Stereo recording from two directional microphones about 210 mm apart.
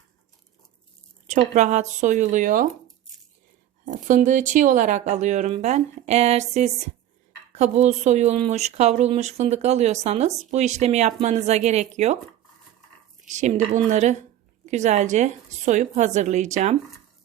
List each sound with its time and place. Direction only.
1.3 s speech: 35° right (ahead or behind)
3.8 s speech: 35° right (ahead or behind)
13.2 s speech: 35° right (ahead or behind)